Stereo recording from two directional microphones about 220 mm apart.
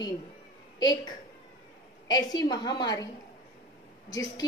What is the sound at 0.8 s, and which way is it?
A woman's voice, 20° left (ahead or behind).